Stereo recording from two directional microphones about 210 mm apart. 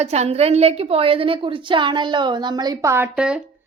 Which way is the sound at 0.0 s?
30° right (ahead or behind).